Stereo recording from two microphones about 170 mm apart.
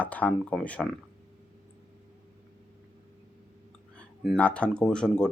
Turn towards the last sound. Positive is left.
turn(degrees=5)  # may be behind; listen again after turning